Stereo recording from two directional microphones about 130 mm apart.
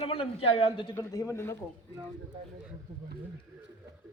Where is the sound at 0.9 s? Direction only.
20° left (ahead or behind).